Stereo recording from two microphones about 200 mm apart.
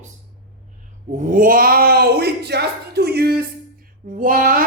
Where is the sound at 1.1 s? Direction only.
45° right (ahead or behind).